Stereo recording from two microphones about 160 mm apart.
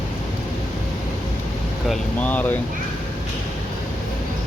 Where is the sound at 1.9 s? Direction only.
10° left (ahead or behind).